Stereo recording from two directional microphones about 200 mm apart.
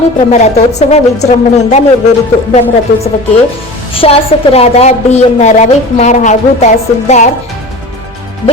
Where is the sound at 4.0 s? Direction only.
30° left (ahead or behind).